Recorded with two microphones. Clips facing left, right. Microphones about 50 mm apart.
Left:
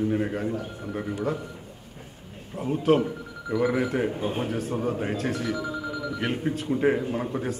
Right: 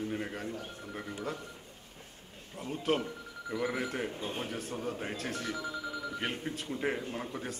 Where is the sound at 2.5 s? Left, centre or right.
Centre.